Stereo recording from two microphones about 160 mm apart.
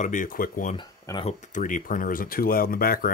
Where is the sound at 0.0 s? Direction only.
55° left (ahead or behind).